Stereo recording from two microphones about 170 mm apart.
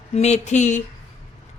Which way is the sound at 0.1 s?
40° left (ahead or behind).